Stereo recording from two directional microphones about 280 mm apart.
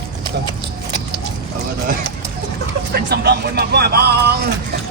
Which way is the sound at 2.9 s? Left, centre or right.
Right.